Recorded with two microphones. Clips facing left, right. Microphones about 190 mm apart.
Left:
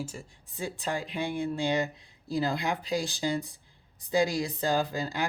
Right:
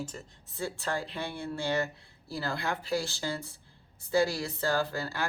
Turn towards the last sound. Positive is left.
turn(degrees=15)  # may be behind; listen again after turning